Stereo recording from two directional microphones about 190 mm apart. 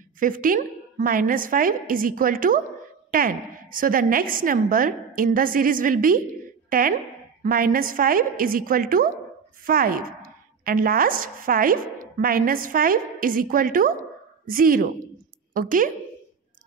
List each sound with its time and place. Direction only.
0.2 s a woman's voice: 45° right (ahead or behind)